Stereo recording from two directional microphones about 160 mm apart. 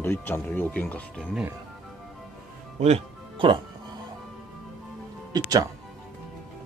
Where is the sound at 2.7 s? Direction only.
40° right (ahead or behind).